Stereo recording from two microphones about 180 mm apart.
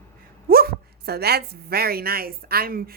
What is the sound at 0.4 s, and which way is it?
A woman's voice, 55° right (ahead or behind).